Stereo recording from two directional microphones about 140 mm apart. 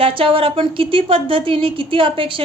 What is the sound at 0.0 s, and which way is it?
A woman's voice, 40° right (ahead or behind).